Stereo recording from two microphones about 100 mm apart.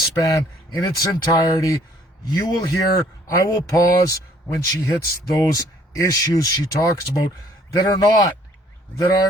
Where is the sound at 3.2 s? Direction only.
35° left (ahead or behind).